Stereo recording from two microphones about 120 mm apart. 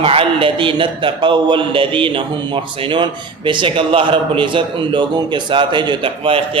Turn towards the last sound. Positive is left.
turn(degrees=-45)  # may be behind; listen again after turning